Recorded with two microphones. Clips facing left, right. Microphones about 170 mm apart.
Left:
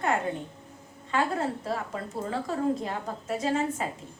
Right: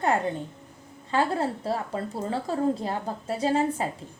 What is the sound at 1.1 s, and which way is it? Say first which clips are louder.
A woman's voice: right 2 dB; 30° right (ahead or behind).